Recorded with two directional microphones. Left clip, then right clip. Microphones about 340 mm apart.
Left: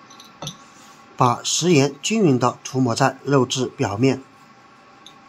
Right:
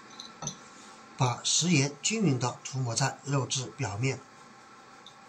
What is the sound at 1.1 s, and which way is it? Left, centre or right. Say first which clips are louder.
Speech: left 10 dB; centre.